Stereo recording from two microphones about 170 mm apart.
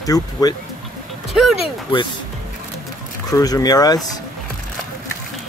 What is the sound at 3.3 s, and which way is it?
Speech, 20° left (ahead or behind).